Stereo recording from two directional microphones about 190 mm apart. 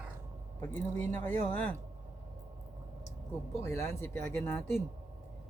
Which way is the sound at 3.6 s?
15° left (ahead or behind).